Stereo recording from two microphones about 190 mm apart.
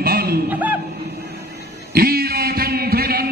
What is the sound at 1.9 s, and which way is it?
Music, 55° right (ahead or behind).